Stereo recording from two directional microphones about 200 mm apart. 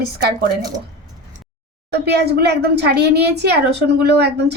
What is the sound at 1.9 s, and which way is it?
Speech, 55° right (ahead or behind).